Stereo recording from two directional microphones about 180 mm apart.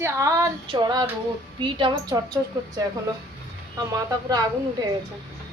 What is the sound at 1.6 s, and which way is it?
Speech, 25° right (ahead or behind).